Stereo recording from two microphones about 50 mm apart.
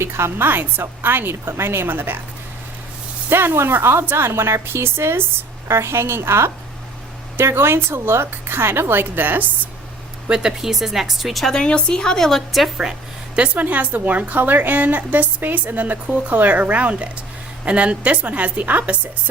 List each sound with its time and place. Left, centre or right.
0.0 s a woman's voice: right
0.4 s a woman's voice: right
3.2 s a woman's voice: right
5.6 s a woman's voice: right
10.2 s speech: centre
11.5 s a woman's voice: centre
12.8 s speech: centre
13.6 s a woman's voice: right